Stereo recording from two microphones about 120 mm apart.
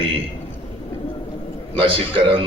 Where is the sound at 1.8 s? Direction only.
45° right (ahead or behind).